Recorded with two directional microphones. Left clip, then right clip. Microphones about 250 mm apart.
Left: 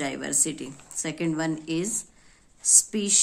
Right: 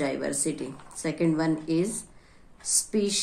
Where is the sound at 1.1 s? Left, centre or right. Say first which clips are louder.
Right 3 dB; left.